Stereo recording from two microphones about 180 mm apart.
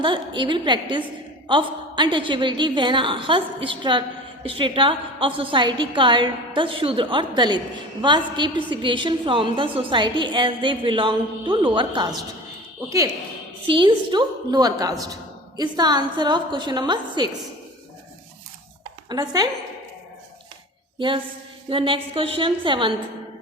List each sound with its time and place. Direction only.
0.0 s a woman's voice: 25° right (ahead or behind)
13.7 s a woman's voice: 25° right (ahead or behind)
19.0 s speech: 20° right (ahead or behind)
21.7 s a woman's voice: 30° right (ahead or behind)